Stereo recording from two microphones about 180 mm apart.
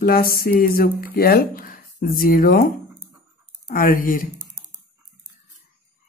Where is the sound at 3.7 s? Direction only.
50° left (ahead or behind).